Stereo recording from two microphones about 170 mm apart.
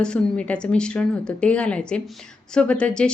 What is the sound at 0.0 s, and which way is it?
A woman's voice, 5° left (ahead or behind).